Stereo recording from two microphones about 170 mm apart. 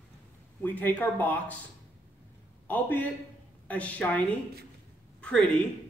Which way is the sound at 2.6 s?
10° left (ahead or behind).